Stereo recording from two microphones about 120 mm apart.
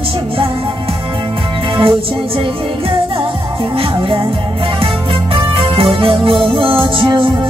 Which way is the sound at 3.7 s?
45° right (ahead or behind).